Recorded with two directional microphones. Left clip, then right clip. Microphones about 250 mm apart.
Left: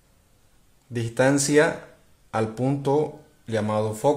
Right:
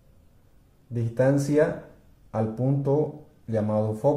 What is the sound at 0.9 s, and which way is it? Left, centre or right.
Speech, left.